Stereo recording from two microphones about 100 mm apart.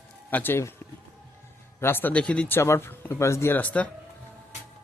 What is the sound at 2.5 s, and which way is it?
Speech, 25° left (ahead or behind).